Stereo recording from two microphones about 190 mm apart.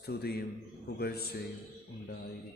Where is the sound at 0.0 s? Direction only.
55° left (ahead or behind).